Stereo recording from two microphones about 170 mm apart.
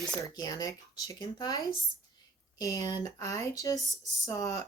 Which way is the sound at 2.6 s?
20° left (ahead or behind).